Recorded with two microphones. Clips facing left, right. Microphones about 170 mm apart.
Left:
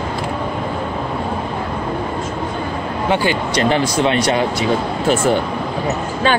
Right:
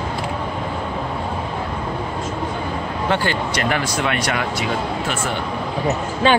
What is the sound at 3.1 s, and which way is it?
Speech, 15° left (ahead or behind).